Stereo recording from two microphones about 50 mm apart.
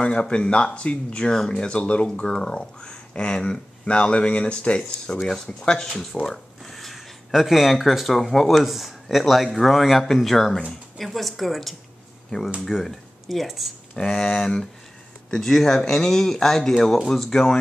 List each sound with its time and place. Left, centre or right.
0.0 s a man's voice: centre
13.9 s speech: centre